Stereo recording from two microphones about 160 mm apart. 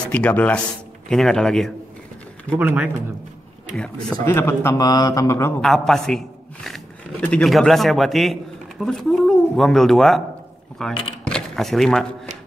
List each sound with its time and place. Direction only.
0.1 s speech: 10° left (ahead or behind)
2.5 s speech: 10° right (ahead or behind)
3.7 s speech: 5° left (ahead or behind)
4.2 s speech: 15° left (ahead or behind)
5.6 s a man's voice: centre (ahead or behind)
11.2 s shuffling cards: 5° left (ahead or behind)